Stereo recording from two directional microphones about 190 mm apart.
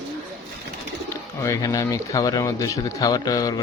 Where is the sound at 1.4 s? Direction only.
15° left (ahead or behind).